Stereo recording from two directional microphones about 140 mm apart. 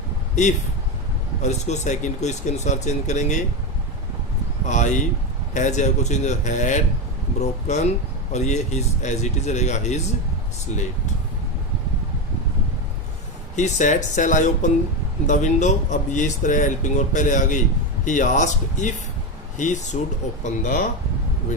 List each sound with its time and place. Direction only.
1.4 s speech: 55° left (ahead or behind)
4.7 s speech: 60° left (ahead or behind)
13.6 s speech: 60° left (ahead or behind)